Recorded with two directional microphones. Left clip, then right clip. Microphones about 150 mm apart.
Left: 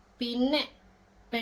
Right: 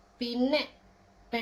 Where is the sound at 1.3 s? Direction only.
10° left (ahead or behind).